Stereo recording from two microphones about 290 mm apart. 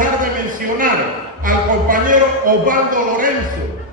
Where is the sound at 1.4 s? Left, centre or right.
Right.